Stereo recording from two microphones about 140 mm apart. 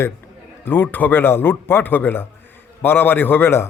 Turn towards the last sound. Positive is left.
turn(degrees=15)  # may be behind; listen again after turning